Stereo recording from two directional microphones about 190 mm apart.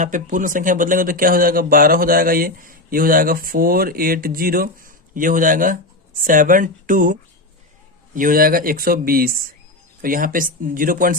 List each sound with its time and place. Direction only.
0.0 s speech: 45° right (ahead or behind)